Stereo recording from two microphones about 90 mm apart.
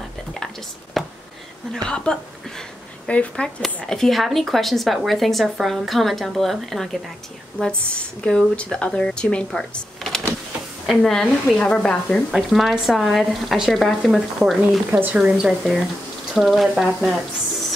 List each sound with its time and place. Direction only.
1.0 s a sound: centre (ahead or behind)
1.9 s speech: 10° left (ahead or behind)
12.3 s speech: centre (ahead or behind)
14.9 s a woman's voice: 20° right (ahead or behind)
15.1 s speech: 5° right (ahead or behind)